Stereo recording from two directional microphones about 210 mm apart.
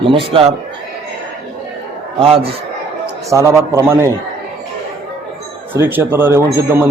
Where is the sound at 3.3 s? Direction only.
15° right (ahead or behind).